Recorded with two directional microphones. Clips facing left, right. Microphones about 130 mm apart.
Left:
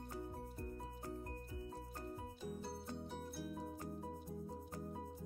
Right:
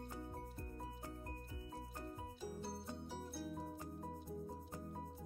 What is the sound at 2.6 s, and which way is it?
Music, 5° right (ahead or behind).